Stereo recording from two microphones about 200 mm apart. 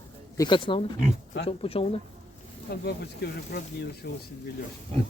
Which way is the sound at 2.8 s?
55° left (ahead or behind).